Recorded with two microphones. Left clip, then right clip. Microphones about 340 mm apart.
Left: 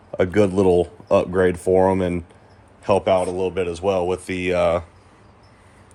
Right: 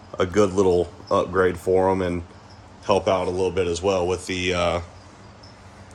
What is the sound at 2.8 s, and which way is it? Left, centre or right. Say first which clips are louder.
Speech: left 3 dB; left.